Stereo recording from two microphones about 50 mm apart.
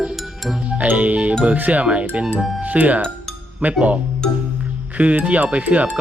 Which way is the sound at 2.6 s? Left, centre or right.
Right.